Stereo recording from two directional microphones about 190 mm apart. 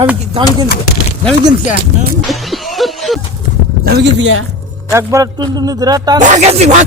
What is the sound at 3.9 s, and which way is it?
Speech, 65° right (ahead or behind).